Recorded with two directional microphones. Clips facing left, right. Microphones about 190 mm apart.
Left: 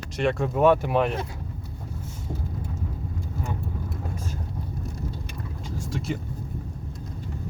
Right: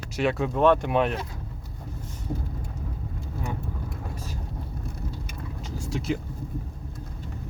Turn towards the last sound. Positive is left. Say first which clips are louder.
# right 2 dB
turn(degrees=0)  # may be behind; listen again after turning